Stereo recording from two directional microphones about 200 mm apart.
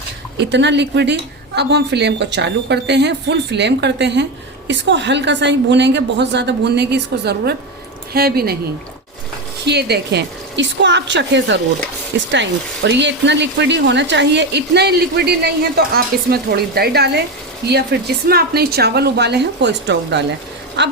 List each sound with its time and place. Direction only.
0.3 s a woman's voice: 60° right (ahead or behind)
9.6 s speech: 55° right (ahead or behind)